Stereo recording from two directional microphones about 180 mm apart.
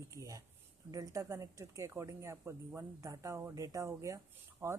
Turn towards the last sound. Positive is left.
turn(degrees=-15)  # may be behind; listen again after turning